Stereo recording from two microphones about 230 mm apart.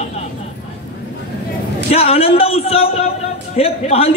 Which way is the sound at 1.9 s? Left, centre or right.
Left.